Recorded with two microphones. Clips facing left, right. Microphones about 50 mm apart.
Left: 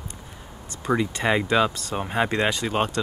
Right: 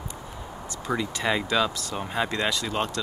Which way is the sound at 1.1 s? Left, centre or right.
Left.